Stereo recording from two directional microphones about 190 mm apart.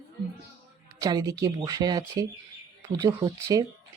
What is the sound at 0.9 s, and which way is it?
Speech, 20° right (ahead or behind).